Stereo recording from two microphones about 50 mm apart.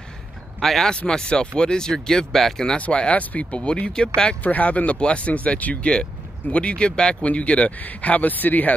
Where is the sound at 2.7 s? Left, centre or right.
Left.